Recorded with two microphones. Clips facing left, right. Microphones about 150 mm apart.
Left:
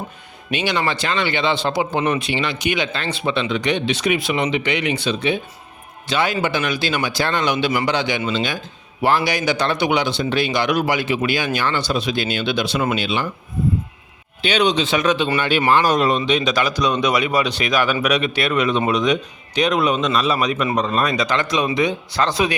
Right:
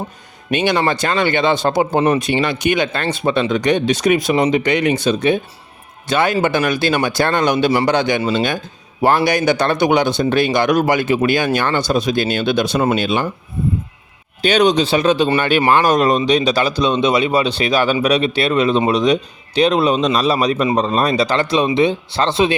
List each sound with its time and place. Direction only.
0.5 s speech: 50° right (ahead or behind)
14.4 s a man's voice: 45° right (ahead or behind)
15.4 s a man's voice: 50° right (ahead or behind); by 22.5 s 25° right (ahead or behind)